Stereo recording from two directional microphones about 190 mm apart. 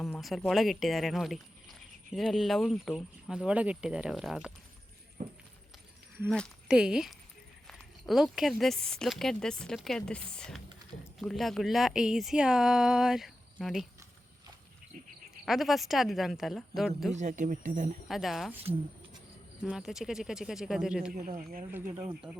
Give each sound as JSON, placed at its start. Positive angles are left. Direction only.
{"t": 0.0, "sound": "speech", "side_deg": 0}
{"t": 5.2, "sound": "a sound", "side_deg": -45}
{"t": 6.2, "sound": "speech", "side_deg": 0}
{"t": 15.4, "sound": "speech", "side_deg": 0}
{"t": 17.1, "sound": "speech", "side_deg": -40}
{"t": 18.1, "sound": "speech", "side_deg": 0}
{"t": 19.6, "sound": "speech", "side_deg": 0}
{"t": 21.2, "sound": "speech", "side_deg": -35}